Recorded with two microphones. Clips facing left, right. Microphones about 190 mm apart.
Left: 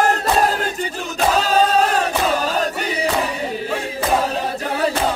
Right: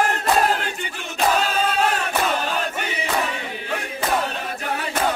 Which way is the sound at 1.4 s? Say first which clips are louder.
Left 5 dB; 40° left (ahead or behind).